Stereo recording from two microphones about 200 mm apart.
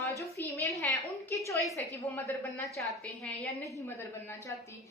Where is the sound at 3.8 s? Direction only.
15° left (ahead or behind).